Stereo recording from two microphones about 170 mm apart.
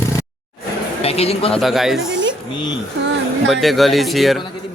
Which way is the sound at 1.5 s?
Centre (ahead or behind).